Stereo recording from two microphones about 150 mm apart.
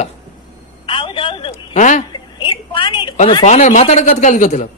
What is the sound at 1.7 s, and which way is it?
Speech, 55° left (ahead or behind).